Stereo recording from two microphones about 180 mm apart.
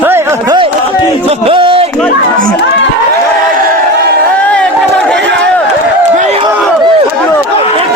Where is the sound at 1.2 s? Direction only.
30° right (ahead or behind).